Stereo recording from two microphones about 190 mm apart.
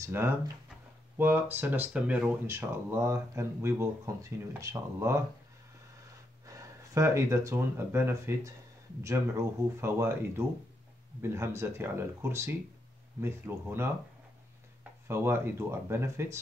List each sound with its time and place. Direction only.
0.0 s speech: 10° right (ahead or behind)
6.4 s speech: 15° right (ahead or behind)